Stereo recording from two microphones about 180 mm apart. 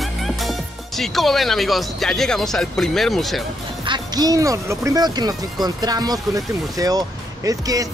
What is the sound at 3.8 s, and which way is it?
Speech, 25° right (ahead or behind).